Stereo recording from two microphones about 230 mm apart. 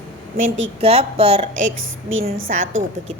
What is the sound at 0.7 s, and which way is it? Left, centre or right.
A woman's voice, right.